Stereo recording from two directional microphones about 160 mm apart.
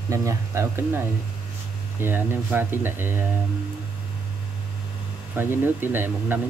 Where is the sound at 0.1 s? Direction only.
20° right (ahead or behind).